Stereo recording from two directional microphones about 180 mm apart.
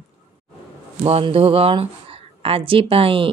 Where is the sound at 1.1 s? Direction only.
30° right (ahead or behind).